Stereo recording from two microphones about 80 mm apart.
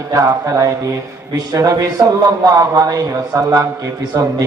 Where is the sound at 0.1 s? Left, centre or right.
Right.